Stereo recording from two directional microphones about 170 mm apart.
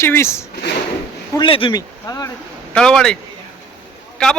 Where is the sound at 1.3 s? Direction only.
30° left (ahead or behind).